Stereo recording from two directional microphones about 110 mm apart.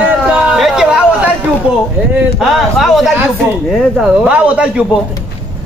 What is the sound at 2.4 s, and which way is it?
A man's voice, centre (ahead or behind).